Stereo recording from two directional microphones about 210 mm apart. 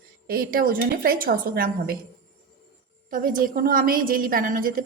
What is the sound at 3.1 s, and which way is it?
A woman's voice, 40° right (ahead or behind).